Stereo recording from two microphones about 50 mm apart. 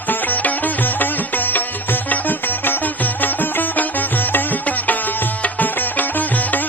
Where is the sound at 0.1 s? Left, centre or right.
Left.